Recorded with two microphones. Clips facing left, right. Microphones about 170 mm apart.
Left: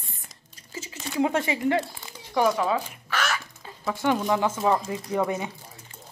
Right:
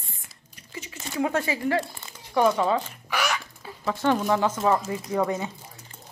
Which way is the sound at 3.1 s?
15° right (ahead or behind).